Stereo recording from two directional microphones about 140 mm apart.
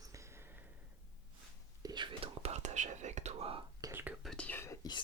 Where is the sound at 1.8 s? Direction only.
30° right (ahead or behind).